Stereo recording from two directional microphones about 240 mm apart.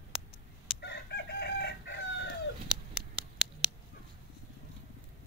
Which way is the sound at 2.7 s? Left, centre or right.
Centre.